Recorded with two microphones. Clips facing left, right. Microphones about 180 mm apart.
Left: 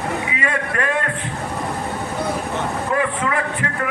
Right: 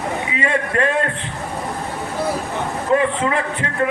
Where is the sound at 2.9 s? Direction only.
25° right (ahead or behind).